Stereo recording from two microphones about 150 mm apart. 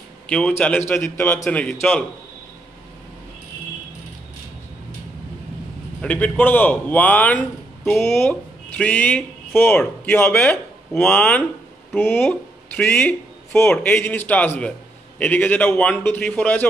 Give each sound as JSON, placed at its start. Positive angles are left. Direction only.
{"t": 0.3, "sound": "speech", "side_deg": 10}
{"t": 5.9, "sound": "speech", "side_deg": 10}